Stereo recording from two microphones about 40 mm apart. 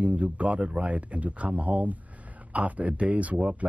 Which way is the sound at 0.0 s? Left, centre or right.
Right.